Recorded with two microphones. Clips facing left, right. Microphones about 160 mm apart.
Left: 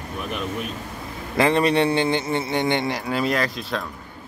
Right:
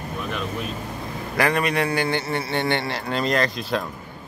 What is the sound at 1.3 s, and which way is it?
A man's voice, 25° left (ahead or behind).